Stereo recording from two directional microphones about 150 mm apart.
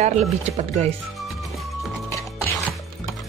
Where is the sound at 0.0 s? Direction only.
45° right (ahead or behind).